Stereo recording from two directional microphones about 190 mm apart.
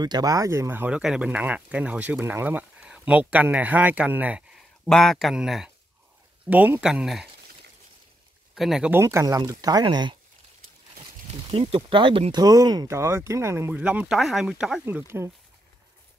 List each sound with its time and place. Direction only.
0.0 s speech: 20° right (ahead or behind); by 7.2 s centre (ahead or behind)
8.5 s speech: centre (ahead or behind)
9.0 s speech: 15° right (ahead or behind)
11.4 s speech: 30° right (ahead or behind); by 15.3 s 10° right (ahead or behind)